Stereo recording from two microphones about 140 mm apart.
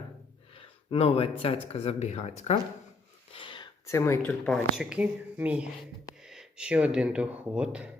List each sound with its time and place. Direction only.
0.9 s speech: 45° left (ahead or behind)
3.3 s a sound: 35° left (ahead or behind)
3.8 s speech: 20° left (ahead or behind)
4.3 s speech: 5° left (ahead or behind)